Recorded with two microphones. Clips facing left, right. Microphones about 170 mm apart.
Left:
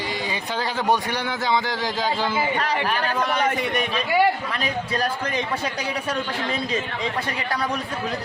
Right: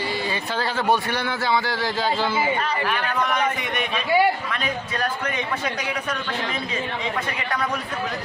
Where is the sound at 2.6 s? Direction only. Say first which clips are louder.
Left 1 dB; 80° left.